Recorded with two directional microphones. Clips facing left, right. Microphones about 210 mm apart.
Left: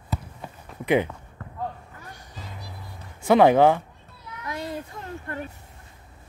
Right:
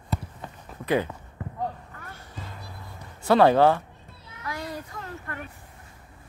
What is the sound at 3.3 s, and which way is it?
Speech, 15° left (ahead or behind).